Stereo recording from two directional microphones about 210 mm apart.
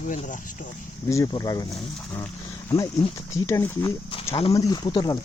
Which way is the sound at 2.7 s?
15° left (ahead or behind).